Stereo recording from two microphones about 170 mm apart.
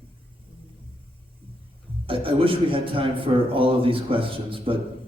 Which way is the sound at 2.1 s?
30° right (ahead or behind).